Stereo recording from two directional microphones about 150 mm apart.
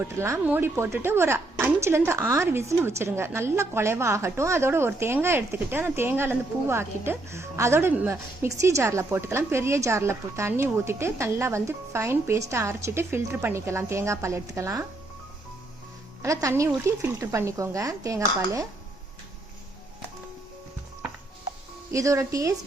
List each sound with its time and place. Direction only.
0.0 s a woman's voice: 15° right (ahead or behind)
16.2 s speech: 20° right (ahead or behind)
21.9 s speech: 20° right (ahead or behind)